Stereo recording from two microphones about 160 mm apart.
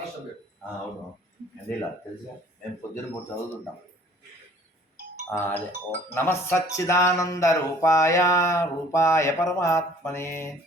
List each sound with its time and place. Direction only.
5.3 s speech: 10° left (ahead or behind)